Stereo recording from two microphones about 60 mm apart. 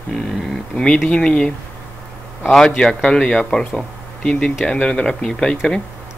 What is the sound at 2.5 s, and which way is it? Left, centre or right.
Speech, centre.